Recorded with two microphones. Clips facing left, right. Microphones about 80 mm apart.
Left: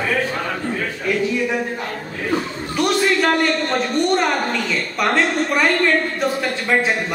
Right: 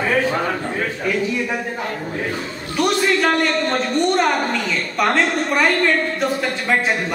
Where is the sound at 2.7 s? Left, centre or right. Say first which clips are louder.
Even; centre.